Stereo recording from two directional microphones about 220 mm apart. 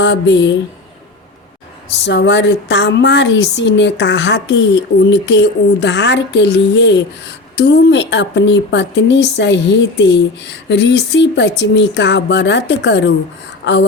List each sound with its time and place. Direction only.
0.0 s a woman's voice: 55° left (ahead or behind)
2.0 s a woman's voice: 55° left (ahead or behind)